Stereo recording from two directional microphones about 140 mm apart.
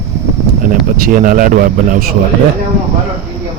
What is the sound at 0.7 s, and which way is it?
Speech, 80° right.